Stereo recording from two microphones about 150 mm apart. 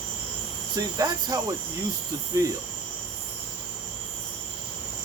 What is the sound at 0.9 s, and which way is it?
Cricket, 25° right (ahead or behind).